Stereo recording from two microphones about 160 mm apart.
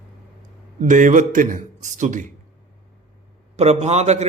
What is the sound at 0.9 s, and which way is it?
Speech, 50° right (ahead or behind).